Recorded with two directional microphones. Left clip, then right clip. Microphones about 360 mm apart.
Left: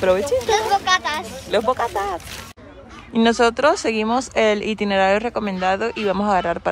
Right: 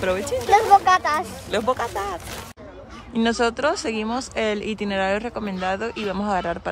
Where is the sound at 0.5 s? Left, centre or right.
Centre.